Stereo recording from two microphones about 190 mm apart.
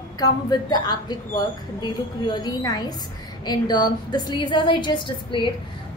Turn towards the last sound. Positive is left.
turn(degrees=25)  # may be behind; listen again after turning